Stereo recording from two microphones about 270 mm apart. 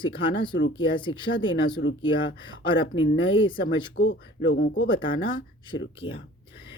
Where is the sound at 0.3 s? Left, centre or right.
Left.